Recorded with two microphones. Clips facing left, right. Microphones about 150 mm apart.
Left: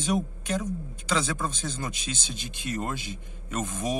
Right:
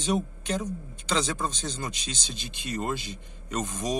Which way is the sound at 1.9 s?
50° left (ahead or behind).